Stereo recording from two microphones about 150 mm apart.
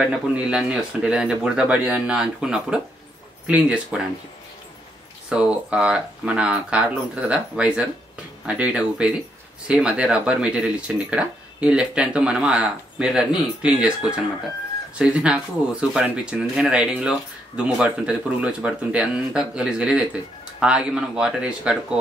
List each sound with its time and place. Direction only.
0.0 s speech: 5° right (ahead or behind)
5.3 s speech: 5° right (ahead or behind)